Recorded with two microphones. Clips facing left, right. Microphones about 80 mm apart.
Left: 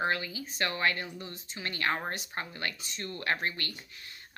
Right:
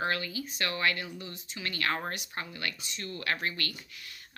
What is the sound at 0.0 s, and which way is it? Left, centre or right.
Speech, left.